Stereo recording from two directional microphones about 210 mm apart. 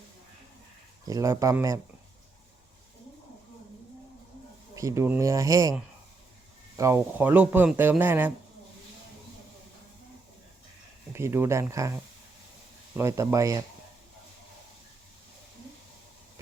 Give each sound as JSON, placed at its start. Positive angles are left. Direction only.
{"t": 1.0, "sound": "speech", "side_deg": -15}
{"t": 4.7, "sound": "speech", "side_deg": -15}
{"t": 6.7, "sound": "speech", "side_deg": -15}
{"t": 11.1, "sound": "speech", "side_deg": -10}
{"t": 13.0, "sound": "speech", "side_deg": -15}